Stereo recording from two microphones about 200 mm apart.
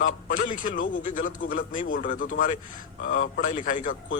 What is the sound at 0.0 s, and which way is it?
Speech, 40° left (ahead or behind).